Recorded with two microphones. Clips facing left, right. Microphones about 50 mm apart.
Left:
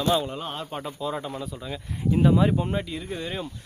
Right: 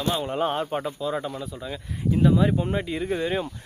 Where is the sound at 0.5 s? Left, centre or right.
Centre.